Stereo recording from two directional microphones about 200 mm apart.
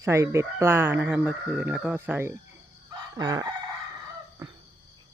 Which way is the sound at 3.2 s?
20° right (ahead or behind).